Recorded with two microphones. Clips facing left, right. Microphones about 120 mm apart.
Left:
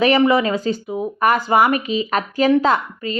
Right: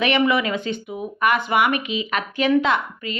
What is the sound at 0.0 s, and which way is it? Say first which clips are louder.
Speech: left 5 dB; 35° left (ahead or behind).